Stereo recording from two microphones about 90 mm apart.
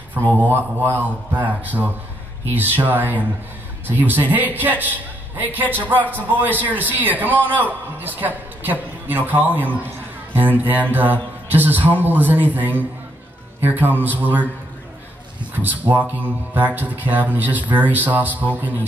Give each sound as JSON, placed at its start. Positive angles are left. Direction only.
{"t": 0.3, "sound": "a woman's voice", "side_deg": -20}
{"t": 15.6, "sound": "speech", "side_deg": -20}